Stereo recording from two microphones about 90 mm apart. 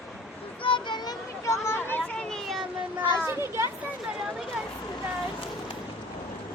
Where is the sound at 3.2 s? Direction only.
30° right (ahead or behind).